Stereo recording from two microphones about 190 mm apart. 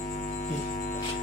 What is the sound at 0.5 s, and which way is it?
Music, 55° left (ahead or behind).